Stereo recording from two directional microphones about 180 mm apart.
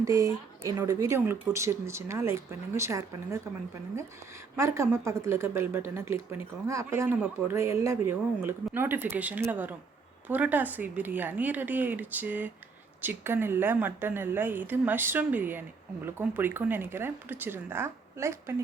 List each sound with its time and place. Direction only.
0.0 s speech: 20° right (ahead or behind)
4.5 s speech: 15° right (ahead or behind)